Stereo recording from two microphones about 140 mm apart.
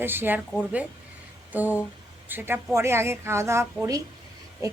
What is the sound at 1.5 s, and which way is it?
A woman's voice, 10° right (ahead or behind).